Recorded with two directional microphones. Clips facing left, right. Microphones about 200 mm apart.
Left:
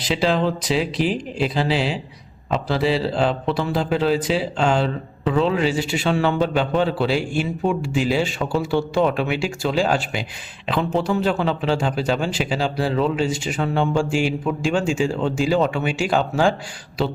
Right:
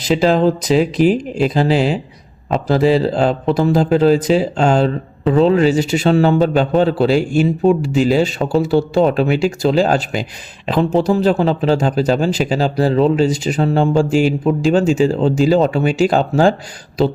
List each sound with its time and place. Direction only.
0.0 s speech: 45° right (ahead or behind)